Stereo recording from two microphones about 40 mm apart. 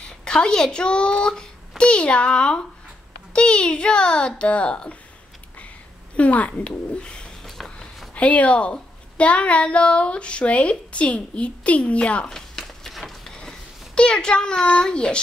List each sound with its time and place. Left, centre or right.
0.0 s a child's voice: left
6.1 s speech: left
7.0 s bird: left
7.4 s walk: centre
8.1 s speech: left
12.3 s a sound: centre
13.3 s a sound: left